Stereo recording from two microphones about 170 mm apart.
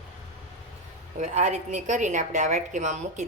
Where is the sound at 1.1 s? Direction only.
45° right (ahead or behind).